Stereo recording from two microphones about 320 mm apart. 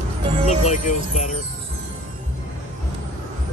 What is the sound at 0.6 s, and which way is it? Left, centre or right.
Speech, left.